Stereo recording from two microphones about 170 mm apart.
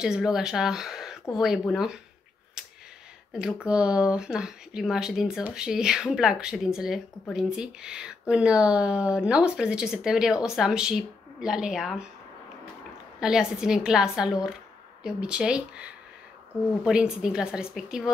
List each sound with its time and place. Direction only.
0.0 s speech: 5° right (ahead or behind)
2.6 s a sound: 5° right (ahead or behind)
3.3 s speech: 5° right (ahead or behind)
13.2 s speech: 5° right (ahead or behind)